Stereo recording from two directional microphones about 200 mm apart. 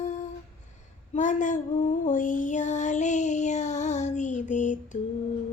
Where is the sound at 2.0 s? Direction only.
40° left (ahead or behind).